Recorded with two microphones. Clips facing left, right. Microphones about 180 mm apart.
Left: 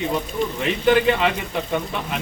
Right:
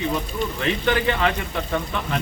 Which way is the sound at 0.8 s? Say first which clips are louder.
Left 5 dB; 15° left (ahead or behind).